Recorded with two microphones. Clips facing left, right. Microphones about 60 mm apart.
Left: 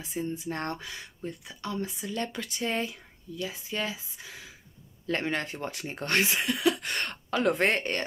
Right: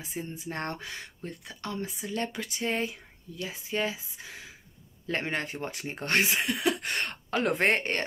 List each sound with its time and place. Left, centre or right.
0.0 s speech: right
1.8 s speech: right